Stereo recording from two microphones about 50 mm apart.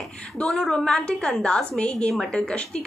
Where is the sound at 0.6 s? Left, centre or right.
Centre.